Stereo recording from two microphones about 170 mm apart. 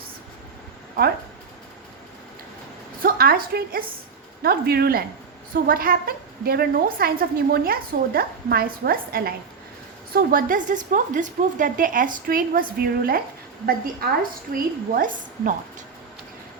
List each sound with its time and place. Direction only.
3.0 s a woman's voice: 60° right (ahead or behind)